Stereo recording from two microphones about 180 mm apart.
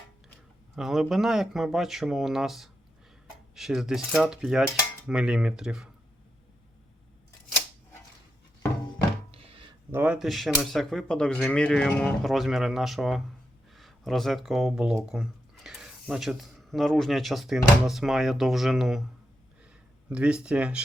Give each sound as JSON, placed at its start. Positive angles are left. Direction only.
{"t": 0.8, "sound": "speech", "side_deg": 0}
{"t": 9.3, "sound": "a sound", "side_deg": -30}
{"t": 9.9, "sound": "speech", "side_deg": -10}
{"t": 20.1, "sound": "speech", "side_deg": -5}